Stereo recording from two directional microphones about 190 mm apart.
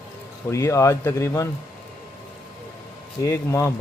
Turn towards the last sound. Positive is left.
turn(degrees=15)  # may be behind; listen again after turning